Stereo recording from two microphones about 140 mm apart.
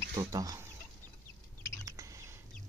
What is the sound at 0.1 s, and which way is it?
Speech, 25° right (ahead or behind).